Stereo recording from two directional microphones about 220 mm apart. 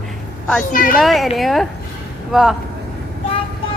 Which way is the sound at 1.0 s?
Centre (ahead or behind).